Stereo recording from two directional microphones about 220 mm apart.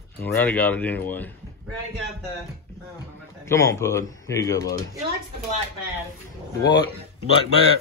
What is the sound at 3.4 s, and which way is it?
Speech, 15° left (ahead or behind).